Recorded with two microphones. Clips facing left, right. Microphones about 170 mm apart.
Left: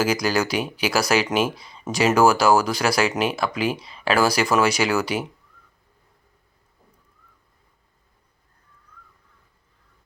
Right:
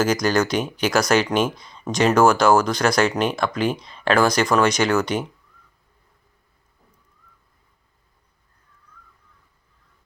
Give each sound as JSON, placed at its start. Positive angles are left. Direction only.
{"t": 0.0, "sound": "speech", "side_deg": 5}